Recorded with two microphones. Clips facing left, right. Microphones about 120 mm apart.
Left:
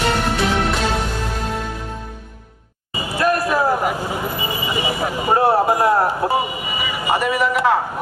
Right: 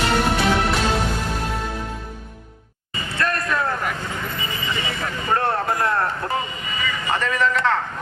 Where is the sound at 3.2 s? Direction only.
10° left (ahead or behind).